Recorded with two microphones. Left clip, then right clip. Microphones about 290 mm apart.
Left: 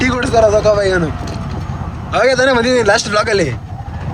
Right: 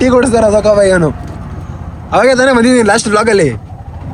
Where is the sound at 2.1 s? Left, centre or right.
Centre.